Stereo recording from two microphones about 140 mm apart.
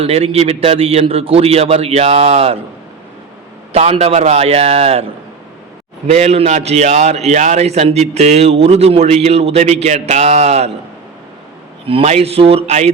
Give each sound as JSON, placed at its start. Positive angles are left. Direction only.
{"t": 0.0, "sound": "a man's voice", "side_deg": -45}
{"t": 3.7, "sound": "a man's voice", "side_deg": -45}
{"t": 6.1, "sound": "a man's voice", "side_deg": -50}
{"t": 11.9, "sound": "a man's voice", "side_deg": -45}